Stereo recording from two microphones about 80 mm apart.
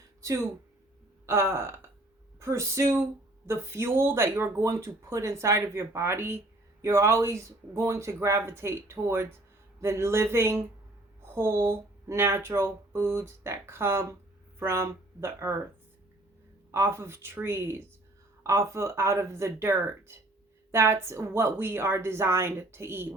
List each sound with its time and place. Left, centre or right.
0.2 s speech: right
16.7 s speech: right